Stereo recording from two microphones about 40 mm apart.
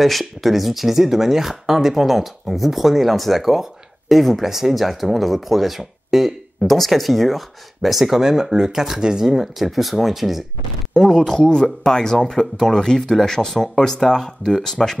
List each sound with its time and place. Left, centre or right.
0.0 s speech: centre
6.6 s speech: centre
8.2 s speech: centre
9.3 s speech: centre
10.9 s speech: centre